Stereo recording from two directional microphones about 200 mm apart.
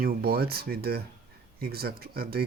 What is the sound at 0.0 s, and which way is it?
Speech, 50° right (ahead or behind).